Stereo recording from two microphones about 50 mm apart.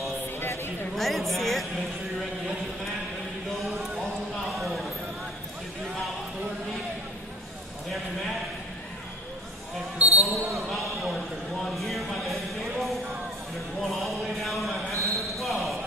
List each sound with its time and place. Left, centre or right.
0.9 s speech: centre
4.5 s a sound: centre
9.9 s speech: right
10.2 s speech: centre
14.9 s basketball bounce: right
15.3 s basketball bounce: centre